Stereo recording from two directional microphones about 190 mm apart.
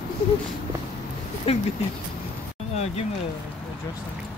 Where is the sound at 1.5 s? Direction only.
35° left (ahead or behind).